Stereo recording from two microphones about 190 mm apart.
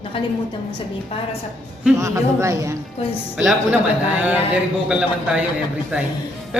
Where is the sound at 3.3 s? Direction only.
5° right (ahead or behind).